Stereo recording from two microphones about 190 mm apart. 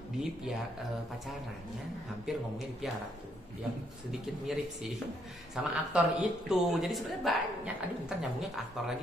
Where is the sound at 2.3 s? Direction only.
Centre (ahead or behind).